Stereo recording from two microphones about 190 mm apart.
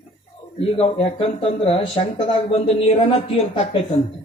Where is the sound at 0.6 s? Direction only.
30° left (ahead or behind).